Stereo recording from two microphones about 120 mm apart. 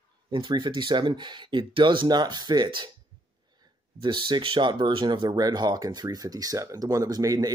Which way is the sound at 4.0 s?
40° right (ahead or behind).